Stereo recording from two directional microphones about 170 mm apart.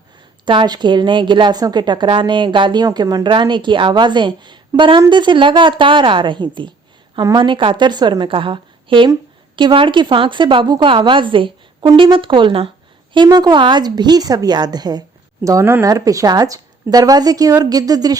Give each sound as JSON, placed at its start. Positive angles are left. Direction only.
{"t": 0.4, "sound": "a woman's voice", "side_deg": -25}